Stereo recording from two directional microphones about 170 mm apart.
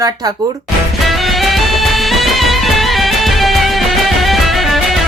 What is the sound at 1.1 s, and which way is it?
Music, centre (ahead or behind).